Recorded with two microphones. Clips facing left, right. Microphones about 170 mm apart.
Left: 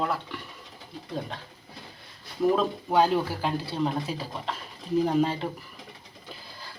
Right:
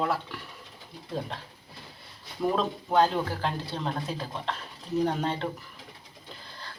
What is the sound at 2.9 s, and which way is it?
Speech, 10° left (ahead or behind).